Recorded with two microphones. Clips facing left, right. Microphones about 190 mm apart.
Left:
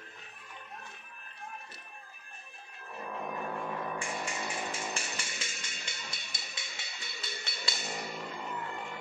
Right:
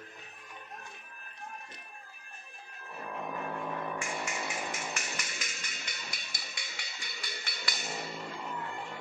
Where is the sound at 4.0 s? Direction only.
30° left (ahead or behind).